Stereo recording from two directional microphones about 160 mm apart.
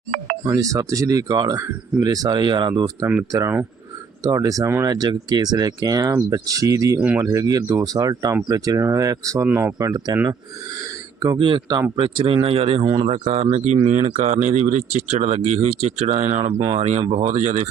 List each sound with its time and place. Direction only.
0.4 s speech: 20° right (ahead or behind)
11.2 s speech: 30° right (ahead or behind)
13.2 s speech: 40° right (ahead or behind)